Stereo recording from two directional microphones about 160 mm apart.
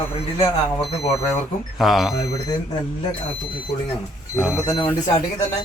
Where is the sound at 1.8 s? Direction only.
Centre (ahead or behind).